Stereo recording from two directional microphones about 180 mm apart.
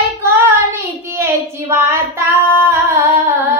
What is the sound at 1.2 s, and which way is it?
Speech, 15° right (ahead or behind).